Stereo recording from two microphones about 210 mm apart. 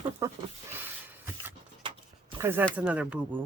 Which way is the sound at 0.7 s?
10° right (ahead or behind).